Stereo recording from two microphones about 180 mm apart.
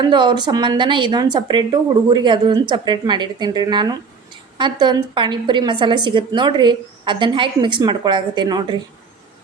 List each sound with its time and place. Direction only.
0.0 s a woman's voice: 25° right (ahead or behind)